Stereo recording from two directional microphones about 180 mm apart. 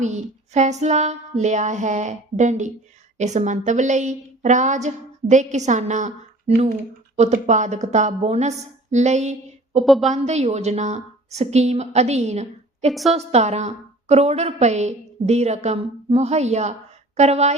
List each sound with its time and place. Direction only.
0.0 s a woman's voice: 40° right (ahead or behind)
7.2 s a woman's voice: 40° right (ahead or behind)
9.8 s a woman's voice: centre (ahead or behind)
10.1 s a woman's voice: 40° right (ahead or behind)
12.9 s a woman's voice: centre (ahead or behind)
13.1 s a woman's voice: 35° right (ahead or behind)